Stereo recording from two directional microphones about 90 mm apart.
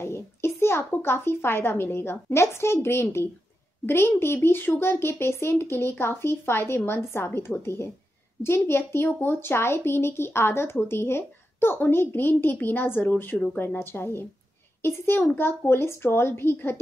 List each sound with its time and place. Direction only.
0.0 s speech: 30° left (ahead or behind)